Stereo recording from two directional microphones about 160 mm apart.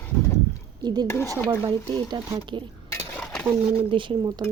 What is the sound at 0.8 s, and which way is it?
Speech, 25° right (ahead or behind).